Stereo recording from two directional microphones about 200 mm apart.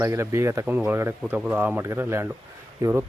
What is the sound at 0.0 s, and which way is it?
Speech, 15° right (ahead or behind).